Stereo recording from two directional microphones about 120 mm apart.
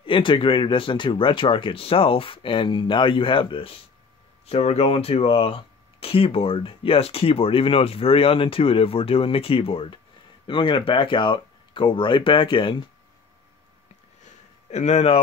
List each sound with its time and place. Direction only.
0.0 s speech: 45° left (ahead or behind)
4.5 s speech: 60° left (ahead or behind); by 12.8 s 45° left (ahead or behind)
14.2 s a sound: 70° left (ahead or behind)